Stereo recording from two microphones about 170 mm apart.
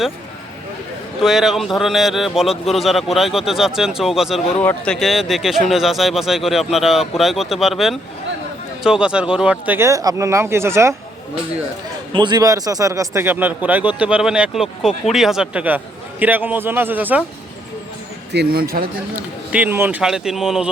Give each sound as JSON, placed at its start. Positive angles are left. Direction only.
{"t": 1.2, "sound": "a man's voice", "side_deg": 0}
{"t": 4.6, "sound": "speech", "side_deg": 10}
{"t": 4.9, "sound": "a man's voice", "side_deg": 0}
{"t": 12.1, "sound": "speech", "side_deg": -25}
{"t": 18.3, "sound": "speech", "side_deg": -70}
{"t": 19.5, "sound": "a man's voice", "side_deg": -10}